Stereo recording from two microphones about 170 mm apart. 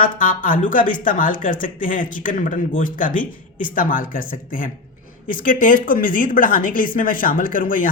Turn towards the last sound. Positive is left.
turn(degrees=55)  # may be behind; listen again after turning